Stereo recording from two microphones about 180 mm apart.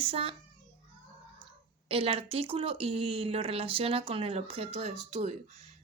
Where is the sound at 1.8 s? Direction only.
30° right (ahead or behind).